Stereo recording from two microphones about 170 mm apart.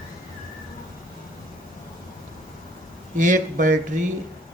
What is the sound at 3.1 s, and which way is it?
Speech, 50° right (ahead or behind).